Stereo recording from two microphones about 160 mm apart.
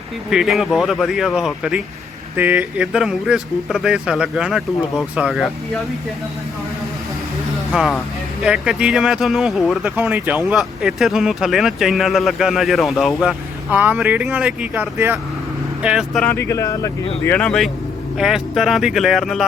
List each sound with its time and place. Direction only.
0.3 s speech: centre (ahead or behind)
7.7 s speech: 5° right (ahead or behind)
13.7 s speech: 10° right (ahead or behind)
16.2 s speech: 15° left (ahead or behind)
17.2 s speech: 10° left (ahead or behind)